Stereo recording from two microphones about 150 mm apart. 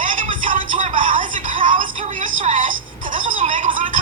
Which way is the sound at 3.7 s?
60° right (ahead or behind).